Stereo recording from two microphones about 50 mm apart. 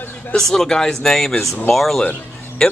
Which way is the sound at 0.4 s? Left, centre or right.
Centre.